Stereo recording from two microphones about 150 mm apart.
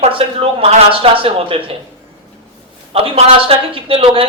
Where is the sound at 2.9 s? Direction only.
40° right (ahead or behind).